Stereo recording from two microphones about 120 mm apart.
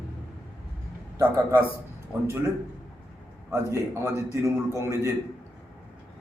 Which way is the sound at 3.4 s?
20° right (ahead or behind).